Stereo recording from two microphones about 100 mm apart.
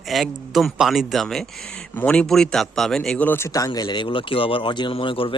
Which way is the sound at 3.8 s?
50° left (ahead or behind).